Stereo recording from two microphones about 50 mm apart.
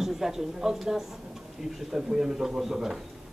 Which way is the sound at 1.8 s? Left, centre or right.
Centre.